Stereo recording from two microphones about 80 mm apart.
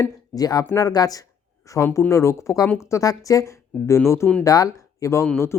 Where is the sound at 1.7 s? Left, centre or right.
Left.